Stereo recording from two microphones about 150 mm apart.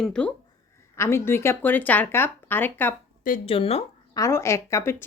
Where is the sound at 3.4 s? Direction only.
40° left (ahead or behind).